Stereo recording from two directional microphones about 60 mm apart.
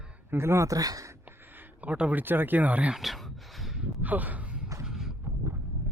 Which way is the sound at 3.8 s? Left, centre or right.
Right.